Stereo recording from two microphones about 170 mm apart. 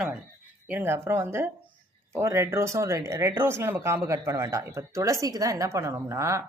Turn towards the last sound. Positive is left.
turn(degrees=-15)  # may be behind; listen again after turning